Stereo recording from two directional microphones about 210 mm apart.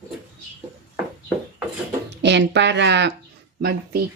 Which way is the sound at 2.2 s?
55° right (ahead or behind).